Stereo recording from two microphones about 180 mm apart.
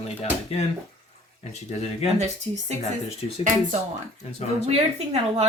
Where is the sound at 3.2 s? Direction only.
35° left (ahead or behind).